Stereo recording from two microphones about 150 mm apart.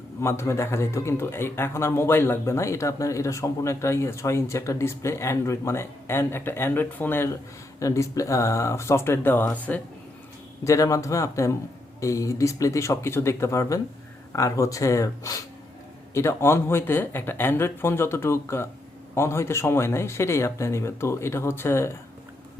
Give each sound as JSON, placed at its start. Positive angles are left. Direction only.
{"t": 0.2, "sound": "a man's voice", "side_deg": 15}
{"t": 10.6, "sound": "a man's voice", "side_deg": 20}